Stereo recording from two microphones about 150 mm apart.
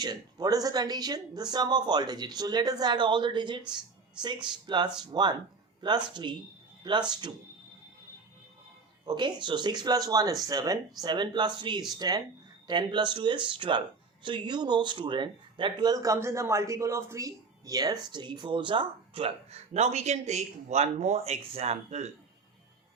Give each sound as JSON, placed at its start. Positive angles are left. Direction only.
{"t": 0.0, "sound": "speech", "side_deg": -25}
{"t": 9.0, "sound": "speech", "side_deg": -30}